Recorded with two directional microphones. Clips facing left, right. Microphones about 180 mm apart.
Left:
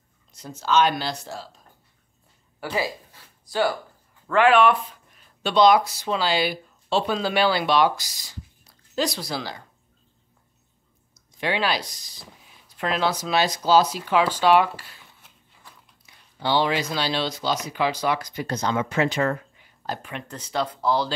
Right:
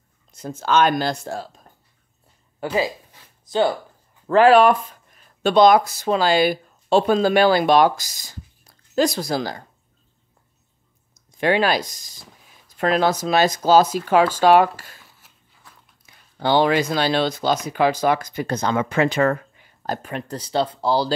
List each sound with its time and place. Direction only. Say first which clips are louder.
0.3 s speech: right 3 dB; 50° right (ahead or behind)
2.6 s speech: right 5 dB; 20° right (ahead or behind)
4.3 s speech: right 4 dB; 35° right (ahead or behind)
11.1 s speech: right 7 dB; 50° right (ahead or behind)
15.2 s biting: left 1 dB; centre (ahead or behind)
16.3 s speech: right 5 dB; 50° right (ahead or behind)
19.8 s speech: right 5 dB; 45° right (ahead or behind)